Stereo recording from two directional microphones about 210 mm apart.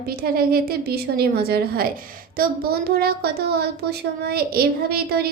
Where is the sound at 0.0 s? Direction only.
45° right (ahead or behind).